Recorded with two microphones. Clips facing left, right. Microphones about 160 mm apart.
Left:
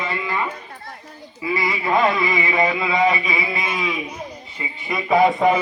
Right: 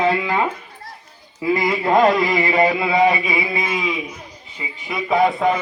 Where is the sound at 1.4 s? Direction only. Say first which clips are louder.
Right 4 dB; 50° right (ahead or behind); by 3.6 s 25° right (ahead or behind).